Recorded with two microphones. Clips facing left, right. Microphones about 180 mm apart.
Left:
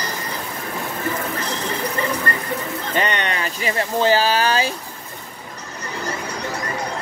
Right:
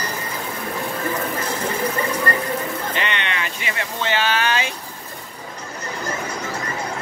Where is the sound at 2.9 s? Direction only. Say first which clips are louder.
Left 3 dB; 40° left (ahead or behind).